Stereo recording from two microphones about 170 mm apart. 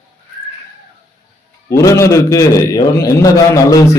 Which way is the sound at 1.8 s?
20° left (ahead or behind).